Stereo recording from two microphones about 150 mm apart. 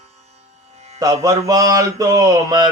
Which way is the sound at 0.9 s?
25° right (ahead or behind).